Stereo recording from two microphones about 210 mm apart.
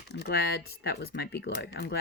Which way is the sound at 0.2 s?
50° left (ahead or behind).